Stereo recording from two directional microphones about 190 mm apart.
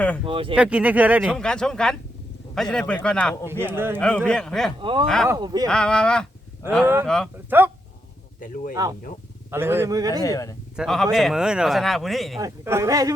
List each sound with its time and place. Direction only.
0.3 s speech: 25° right (ahead or behind)
0.5 s speech: 5° right (ahead or behind)
1.4 s speech: 5° left (ahead or behind)
3.4 s speech: 10° right (ahead or behind)
4.0 s speech: 5° left (ahead or behind)
4.8 s speech: 25° right (ahead or behind)
5.0 s speech: 5° left (ahead or behind)
5.3 s speech: 20° right (ahead or behind)
5.6 s speech: 5° left (ahead or behind)
6.8 s speech: 10° right (ahead or behind)
8.7 s speech: 20° right (ahead or behind)
10.2 s speech: 15° left (ahead or behind)
10.8 s speech: centre (ahead or behind)
12.4 s speech: 15° right (ahead or behind)